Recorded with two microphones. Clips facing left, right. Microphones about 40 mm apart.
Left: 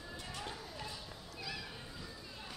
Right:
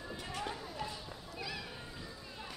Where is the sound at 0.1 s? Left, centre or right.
Right.